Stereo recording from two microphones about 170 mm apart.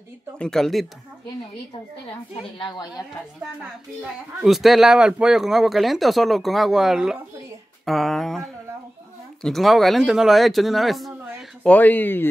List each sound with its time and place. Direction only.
0.4 s speech: 5° left (ahead or behind)
2.6 s a woman's voice: 25° left (ahead or behind)
4.0 s speech: centre (ahead or behind)